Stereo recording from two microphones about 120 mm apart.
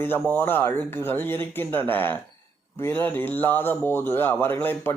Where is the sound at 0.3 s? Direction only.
15° left (ahead or behind).